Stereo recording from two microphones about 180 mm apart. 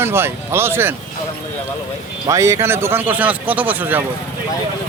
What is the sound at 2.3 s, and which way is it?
A man's voice, 15° right (ahead or behind).